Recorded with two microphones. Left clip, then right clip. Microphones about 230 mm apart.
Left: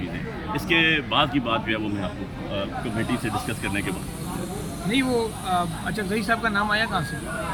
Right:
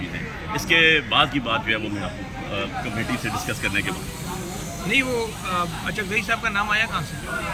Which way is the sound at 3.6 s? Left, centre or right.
Centre.